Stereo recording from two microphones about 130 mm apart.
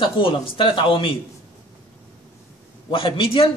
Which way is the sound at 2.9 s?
45° left (ahead or behind).